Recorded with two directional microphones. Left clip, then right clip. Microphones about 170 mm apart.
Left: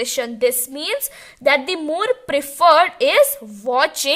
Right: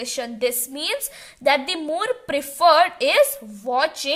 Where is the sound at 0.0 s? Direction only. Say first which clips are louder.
Left 6 dB; 45° left (ahead or behind).